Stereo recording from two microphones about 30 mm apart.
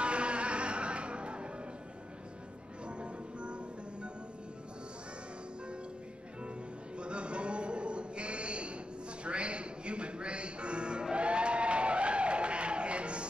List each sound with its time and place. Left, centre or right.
0.0 s music: right
2.9 s music: right
7.0 s a sound: right
9.2 s music: right